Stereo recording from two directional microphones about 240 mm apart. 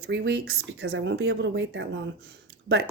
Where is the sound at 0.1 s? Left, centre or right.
Right.